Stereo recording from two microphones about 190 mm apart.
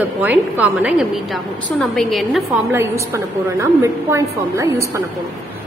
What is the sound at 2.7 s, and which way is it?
A woman's voice, 15° right (ahead or behind).